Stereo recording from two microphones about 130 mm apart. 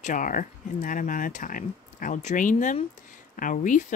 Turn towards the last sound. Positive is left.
turn(degrees=85)